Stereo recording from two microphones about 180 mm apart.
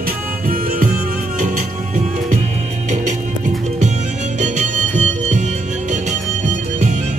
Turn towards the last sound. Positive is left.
turn(degrees=-40)  # may be behind; listen again after turning